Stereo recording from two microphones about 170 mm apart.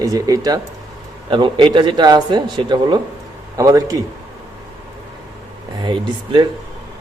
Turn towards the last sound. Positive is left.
turn(degrees=-30)  # may be behind; listen again after turning